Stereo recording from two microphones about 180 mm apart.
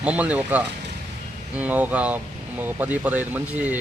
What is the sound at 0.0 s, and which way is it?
A man's voice, 5° right (ahead or behind).